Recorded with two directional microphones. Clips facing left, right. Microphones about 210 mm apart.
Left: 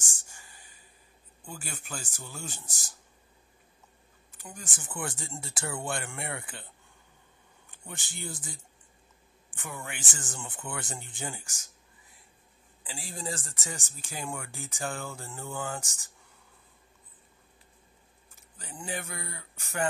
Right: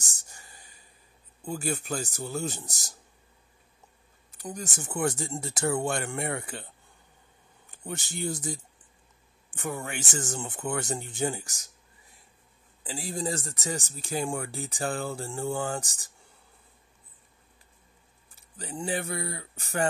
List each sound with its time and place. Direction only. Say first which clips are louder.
0.0 s a sound: right 1 dB; 40° right (ahead or behind)
1.4 s speech: right 11 dB; 40° right (ahead or behind)
4.4 s speech: right 9 dB; 40° right (ahead or behind)
7.7 s speech: right 8 dB; 40° right (ahead or behind)
12.8 s speech: right 6 dB; 40° right (ahead or behind)
18.6 s speech: right 6 dB; 35° right (ahead or behind)